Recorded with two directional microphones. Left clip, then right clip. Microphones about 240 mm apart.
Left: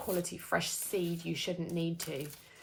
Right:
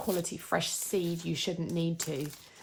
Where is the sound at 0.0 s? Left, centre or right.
Right.